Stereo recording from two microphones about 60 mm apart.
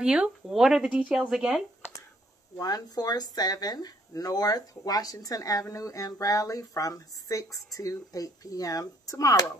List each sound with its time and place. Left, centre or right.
0.0 s speech: centre
2.6 s speech: left